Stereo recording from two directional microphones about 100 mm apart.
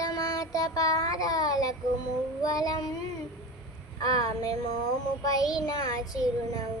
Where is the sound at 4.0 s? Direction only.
40° left (ahead or behind).